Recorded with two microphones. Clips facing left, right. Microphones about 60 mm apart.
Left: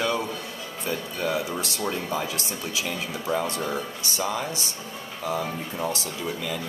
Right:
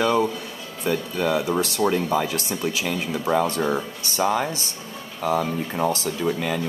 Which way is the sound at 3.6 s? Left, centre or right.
Right.